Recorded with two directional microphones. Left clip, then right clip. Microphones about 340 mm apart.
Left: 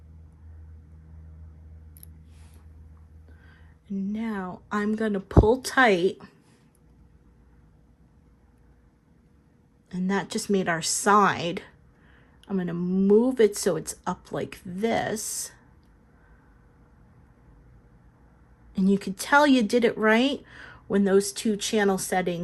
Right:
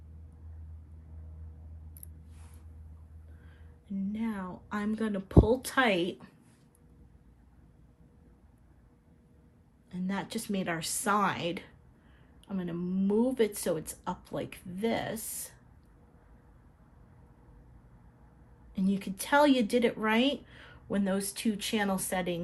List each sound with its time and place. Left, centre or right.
4.1 s speech: centre
10.1 s speech: centre
18.7 s speech: centre